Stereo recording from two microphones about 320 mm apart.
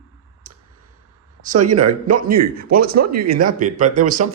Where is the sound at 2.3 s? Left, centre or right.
Right.